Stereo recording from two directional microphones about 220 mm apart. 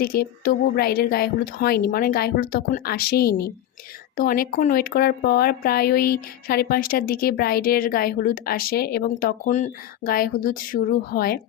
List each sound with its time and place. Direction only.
0.0 s a woman's voice: 45° left (ahead or behind)